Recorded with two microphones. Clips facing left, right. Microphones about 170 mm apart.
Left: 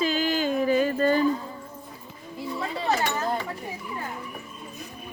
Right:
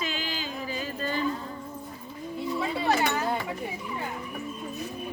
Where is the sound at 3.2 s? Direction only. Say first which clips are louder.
Left 1 dB; 10° right (ahead or behind).